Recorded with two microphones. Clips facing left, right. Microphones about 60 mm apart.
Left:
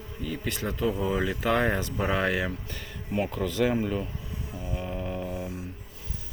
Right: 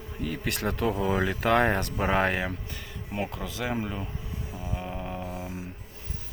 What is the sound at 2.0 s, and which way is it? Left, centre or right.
Speech, right.